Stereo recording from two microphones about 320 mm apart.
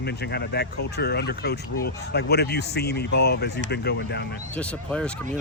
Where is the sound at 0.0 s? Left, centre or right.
Left.